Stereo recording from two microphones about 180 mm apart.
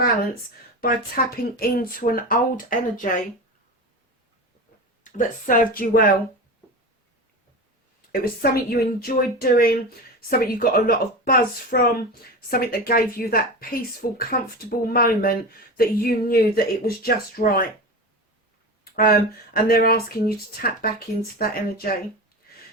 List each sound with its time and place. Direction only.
0.8 s speech: 55° left (ahead or behind)
5.0 s speech: 45° left (ahead or behind)
8.1 s a woman's voice: 55° left (ahead or behind)
18.9 s a woman's voice: 55° left (ahead or behind)